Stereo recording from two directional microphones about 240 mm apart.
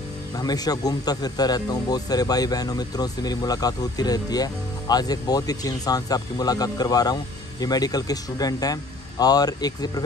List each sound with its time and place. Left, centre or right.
0.4 s speech: centre